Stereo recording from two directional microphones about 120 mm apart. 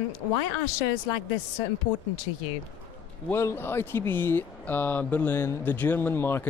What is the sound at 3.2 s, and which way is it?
Speech, 20° left (ahead or behind).